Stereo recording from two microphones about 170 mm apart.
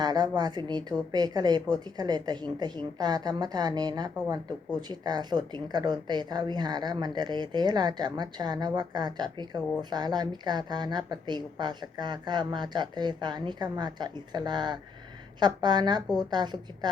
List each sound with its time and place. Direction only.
0.0 s a woman's voice: 25° right (ahead or behind)